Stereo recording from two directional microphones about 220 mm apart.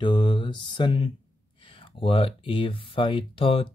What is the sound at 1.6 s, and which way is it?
Speech, 25° left (ahead or behind).